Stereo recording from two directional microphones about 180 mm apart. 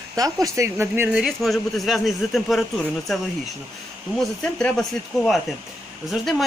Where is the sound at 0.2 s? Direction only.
20° right (ahead or behind).